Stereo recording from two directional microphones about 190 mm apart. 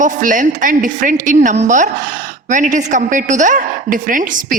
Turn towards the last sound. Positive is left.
turn(degrees=-45)  # may be behind; listen again after turning